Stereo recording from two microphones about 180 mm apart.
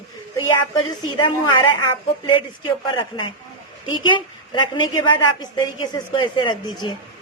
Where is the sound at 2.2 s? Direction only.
25° left (ahead or behind).